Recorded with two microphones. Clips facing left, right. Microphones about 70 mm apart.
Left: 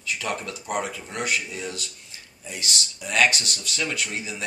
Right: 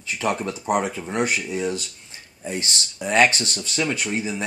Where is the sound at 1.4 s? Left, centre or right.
Centre.